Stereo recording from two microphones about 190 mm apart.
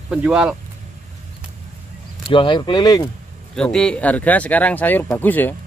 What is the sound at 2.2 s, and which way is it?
Speech, 25° left (ahead or behind).